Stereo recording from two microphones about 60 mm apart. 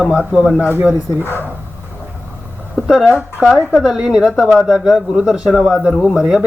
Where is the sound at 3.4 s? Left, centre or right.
Centre.